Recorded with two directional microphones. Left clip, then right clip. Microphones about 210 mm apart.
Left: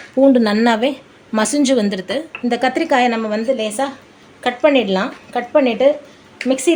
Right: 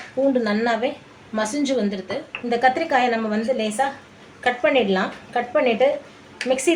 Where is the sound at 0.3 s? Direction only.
50° left (ahead or behind).